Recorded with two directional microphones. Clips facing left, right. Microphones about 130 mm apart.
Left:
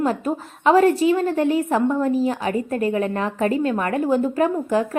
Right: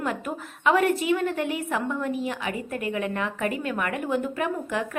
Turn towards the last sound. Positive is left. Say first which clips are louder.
# left 7 dB
turn(degrees=35)  # may be behind; listen again after turning